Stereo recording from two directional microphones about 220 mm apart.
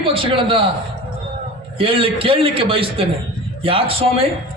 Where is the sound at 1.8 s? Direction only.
25° right (ahead or behind).